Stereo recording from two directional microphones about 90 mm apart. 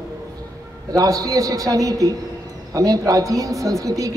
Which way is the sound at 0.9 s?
40° right (ahead or behind).